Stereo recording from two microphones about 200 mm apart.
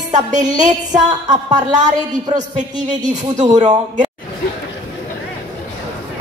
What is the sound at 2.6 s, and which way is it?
Speech, 35° right (ahead or behind).